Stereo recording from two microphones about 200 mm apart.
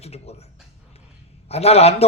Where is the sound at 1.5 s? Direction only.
30° left (ahead or behind).